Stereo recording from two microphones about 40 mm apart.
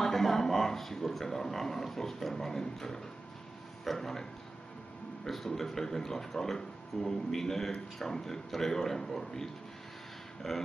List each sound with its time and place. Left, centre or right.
0.0 s a man's voice: centre